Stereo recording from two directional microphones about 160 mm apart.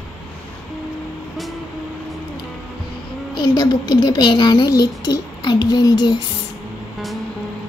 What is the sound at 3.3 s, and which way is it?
Speech, 30° left (ahead or behind).